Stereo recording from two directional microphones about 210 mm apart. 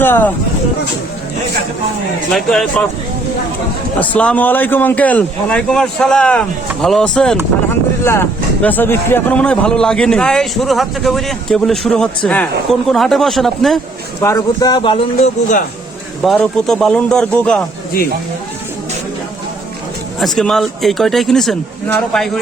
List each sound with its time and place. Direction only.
0.0 s speech: 10° left (ahead or behind)
2.3 s speech: centre (ahead or behind)
4.0 s speech: 5° left (ahead or behind)
14.2 s speech: 15° left (ahead or behind); by 15.6 s 35° left (ahead or behind)
16.2 s speech: 5° left (ahead or behind)
20.1 s speech: centre (ahead or behind)